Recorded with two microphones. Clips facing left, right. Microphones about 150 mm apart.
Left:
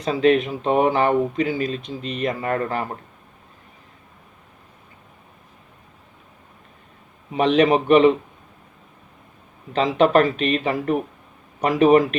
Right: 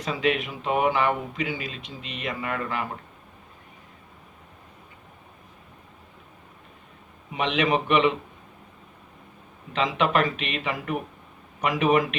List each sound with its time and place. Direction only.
0.0 s speech: 35° left (ahead or behind)
7.3 s speech: 40° left (ahead or behind)
9.7 s speech: 35° left (ahead or behind)